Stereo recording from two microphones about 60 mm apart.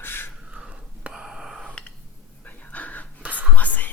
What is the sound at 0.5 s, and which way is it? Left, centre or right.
Whispering, centre.